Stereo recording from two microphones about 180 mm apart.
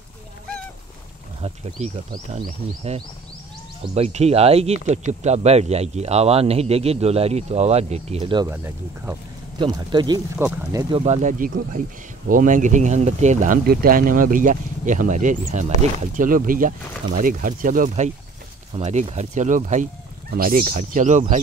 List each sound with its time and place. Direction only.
2.3 s speech: 35° right (ahead or behind)
8.5 s speech: 10° right (ahead or behind)
9.6 s speech: 25° right (ahead or behind)
11.0 s speech: 40° right (ahead or behind)